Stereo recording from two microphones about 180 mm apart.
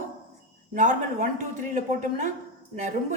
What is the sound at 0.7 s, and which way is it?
A woman's voice, 45° right (ahead or behind).